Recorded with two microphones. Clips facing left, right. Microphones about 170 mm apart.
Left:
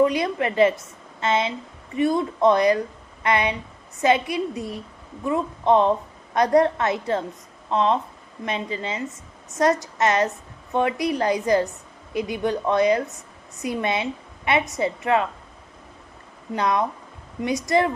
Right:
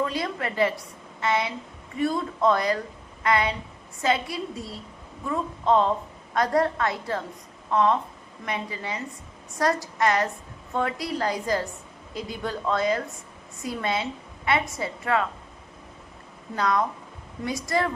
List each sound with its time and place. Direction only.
0.0 s a woman's voice: 20° left (ahead or behind)
16.6 s a woman's voice: 20° left (ahead or behind)